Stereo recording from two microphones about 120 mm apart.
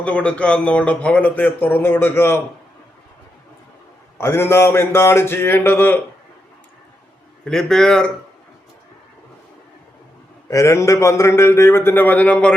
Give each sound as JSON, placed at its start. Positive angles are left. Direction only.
{"t": 0.0, "sound": "speech", "side_deg": 10}
{"t": 4.2, "sound": "a man's voice", "side_deg": 20}
{"t": 7.4, "sound": "a man's voice", "side_deg": 5}
{"t": 10.5, "sound": "a man's voice", "side_deg": 25}